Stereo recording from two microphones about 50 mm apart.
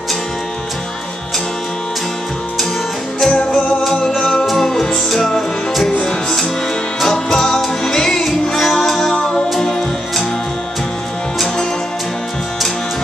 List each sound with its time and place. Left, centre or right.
3.3 s music: centre
4.5 s music: centre
5.9 s music: centre
11.3 s music: centre